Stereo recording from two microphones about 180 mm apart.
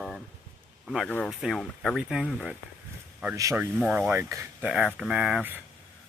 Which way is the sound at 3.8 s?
5° right (ahead or behind).